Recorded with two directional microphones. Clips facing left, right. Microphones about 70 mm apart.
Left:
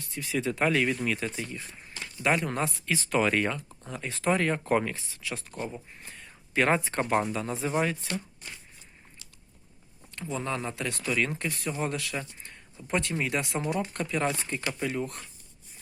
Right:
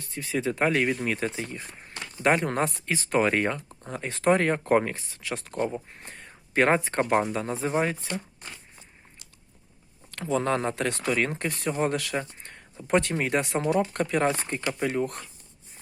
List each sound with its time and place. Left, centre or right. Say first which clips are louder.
0.0 s speech: right 2 dB; right
2.9 s speech: right 1 dB; right
10.1 s speech: right 7 dB; right
12.9 s speech: right 5 dB; right